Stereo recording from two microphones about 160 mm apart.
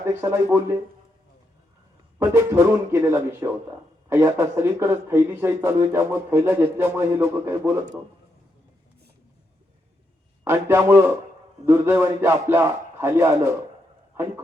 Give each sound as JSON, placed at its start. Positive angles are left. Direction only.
{"t": 0.0, "sound": "speech", "side_deg": -15}
{"t": 2.1, "sound": "speech", "side_deg": -15}
{"t": 10.4, "sound": "speech", "side_deg": -15}